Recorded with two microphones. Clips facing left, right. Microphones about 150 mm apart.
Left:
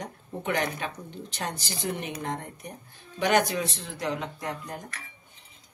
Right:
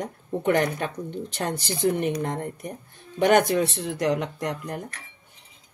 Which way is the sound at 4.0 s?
70° right (ahead or behind).